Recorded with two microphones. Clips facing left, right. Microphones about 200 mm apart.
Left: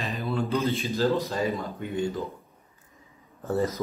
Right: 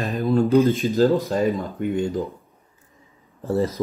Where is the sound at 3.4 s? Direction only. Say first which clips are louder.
Right 4 dB; 30° right (ahead or behind).